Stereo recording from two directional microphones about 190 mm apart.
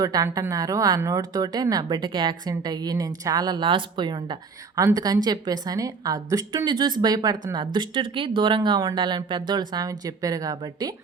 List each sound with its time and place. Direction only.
0.0 s a woman's voice: 20° right (ahead or behind)